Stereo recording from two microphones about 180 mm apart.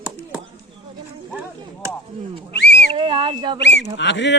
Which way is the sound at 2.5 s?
70° left (ahead or behind).